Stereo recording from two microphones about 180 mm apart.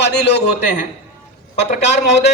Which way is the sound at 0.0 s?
70° left (ahead or behind).